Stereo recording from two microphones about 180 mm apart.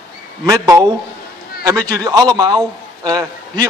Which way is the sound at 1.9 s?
20° right (ahead or behind).